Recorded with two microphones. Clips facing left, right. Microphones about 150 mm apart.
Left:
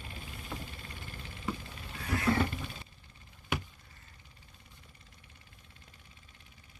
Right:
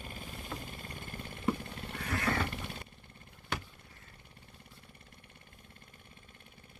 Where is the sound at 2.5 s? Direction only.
65° right (ahead or behind).